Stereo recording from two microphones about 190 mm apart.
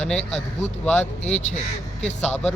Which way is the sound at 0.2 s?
35° left (ahead or behind).